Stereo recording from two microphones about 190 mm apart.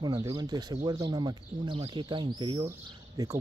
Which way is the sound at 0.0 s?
20° right (ahead or behind).